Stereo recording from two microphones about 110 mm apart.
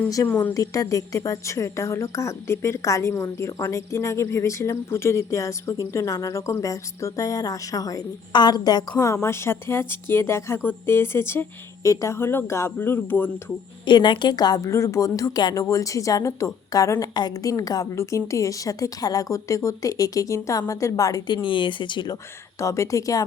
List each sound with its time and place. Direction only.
0.2 s a woman's voice: 30° left (ahead or behind)
8.3 s a woman's voice: 40° left (ahead or behind)
9.2 s a woman's voice: 25° left (ahead or behind)
13.8 s a woman's voice: 45° left (ahead or behind)
21.3 s speech: 50° left (ahead or behind)
22.5 s a woman's voice: 25° left (ahead or behind)